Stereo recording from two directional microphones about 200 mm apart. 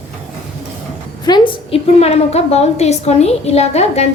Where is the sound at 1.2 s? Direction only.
25° left (ahead or behind).